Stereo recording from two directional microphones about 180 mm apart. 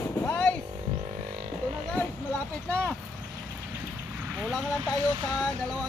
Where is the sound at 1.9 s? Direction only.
10° left (ahead or behind).